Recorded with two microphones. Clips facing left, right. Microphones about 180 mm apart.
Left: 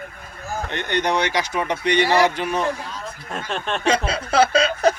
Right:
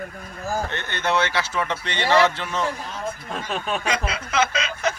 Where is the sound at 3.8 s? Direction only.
30° left (ahead or behind).